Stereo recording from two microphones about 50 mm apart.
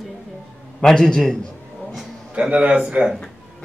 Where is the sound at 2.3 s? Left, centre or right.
Right.